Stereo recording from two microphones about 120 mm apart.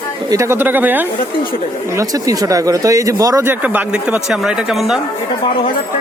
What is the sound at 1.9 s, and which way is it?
Speech, 30° right (ahead or behind).